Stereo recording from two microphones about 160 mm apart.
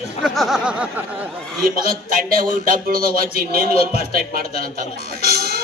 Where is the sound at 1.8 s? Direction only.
65° right (ahead or behind).